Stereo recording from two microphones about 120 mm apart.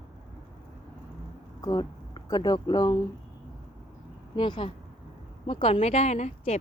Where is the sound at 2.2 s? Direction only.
35° left (ahead or behind).